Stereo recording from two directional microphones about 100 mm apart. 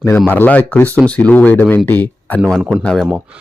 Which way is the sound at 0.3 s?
15° left (ahead or behind).